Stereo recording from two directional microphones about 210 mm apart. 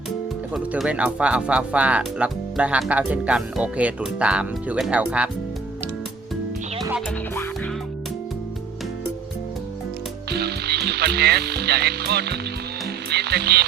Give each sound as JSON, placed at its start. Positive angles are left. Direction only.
{"t": 0.5, "sound": "speech", "side_deg": -5}
{"t": 10.2, "sound": "frog", "side_deg": -50}
{"t": 13.1, "sound": "speech", "side_deg": -50}